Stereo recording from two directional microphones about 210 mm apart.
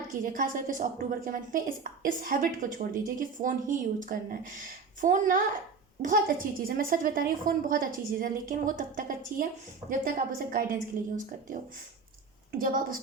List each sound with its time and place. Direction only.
0.1 s a woman's voice: 40° right (ahead or behind)
12.5 s a woman's voice: 45° right (ahead or behind)